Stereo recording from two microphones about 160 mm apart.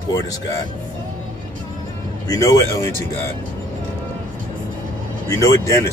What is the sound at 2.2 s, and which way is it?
Speech, 20° left (ahead or behind).